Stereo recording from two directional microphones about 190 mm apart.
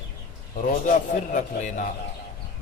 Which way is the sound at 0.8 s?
40° left (ahead or behind).